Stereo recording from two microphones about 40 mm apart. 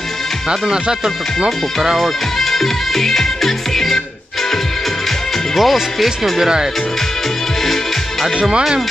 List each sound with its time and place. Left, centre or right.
0.5 s speech: right
2.0 s music: centre
5.5 s speech: centre
7.6 s music: centre
8.4 s speech: right